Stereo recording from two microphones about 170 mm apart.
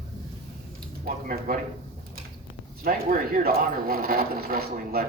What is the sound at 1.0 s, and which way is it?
Speech, 55° right (ahead or behind).